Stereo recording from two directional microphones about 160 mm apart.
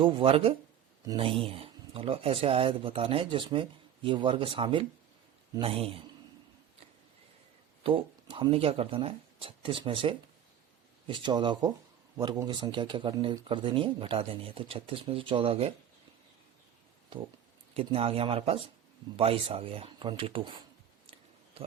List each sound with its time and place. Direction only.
0.0 s speech: 35° right (ahead or behind)
7.9 s speech: 35° right (ahead or behind)
17.7 s speech: 35° right (ahead or behind)